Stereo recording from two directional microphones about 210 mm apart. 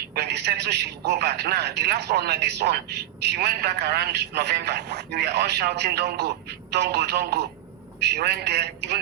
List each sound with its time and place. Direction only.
0.1 s a man's voice: 50° right (ahead or behind)